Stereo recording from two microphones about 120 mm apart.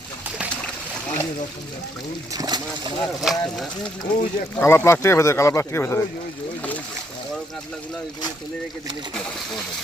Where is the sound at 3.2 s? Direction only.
Centre (ahead or behind).